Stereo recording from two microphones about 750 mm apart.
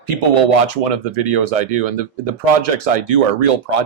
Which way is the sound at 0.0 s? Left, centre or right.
Right.